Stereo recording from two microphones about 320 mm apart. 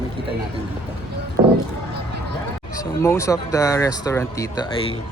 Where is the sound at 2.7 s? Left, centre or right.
Centre.